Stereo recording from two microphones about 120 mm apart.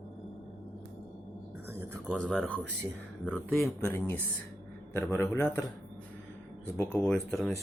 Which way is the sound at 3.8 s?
20° left (ahead or behind).